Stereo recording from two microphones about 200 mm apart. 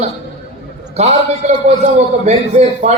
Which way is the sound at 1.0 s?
35° right (ahead or behind).